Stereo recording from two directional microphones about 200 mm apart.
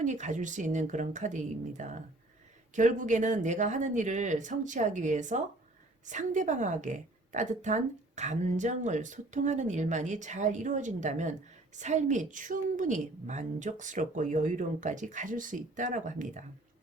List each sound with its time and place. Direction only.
0.0 s a woman's voice: 35° right (ahead or behind)